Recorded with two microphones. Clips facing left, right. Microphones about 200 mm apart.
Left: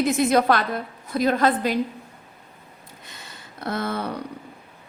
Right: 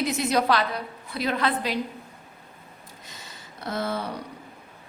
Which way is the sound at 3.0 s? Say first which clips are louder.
Left 2 dB; 60° left (ahead or behind).